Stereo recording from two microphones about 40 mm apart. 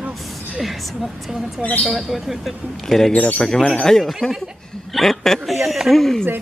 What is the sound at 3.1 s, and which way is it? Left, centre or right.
Speech, left.